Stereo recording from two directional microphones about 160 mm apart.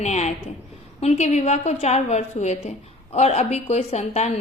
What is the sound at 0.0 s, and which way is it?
A woman's voice, 45° left (ahead or behind).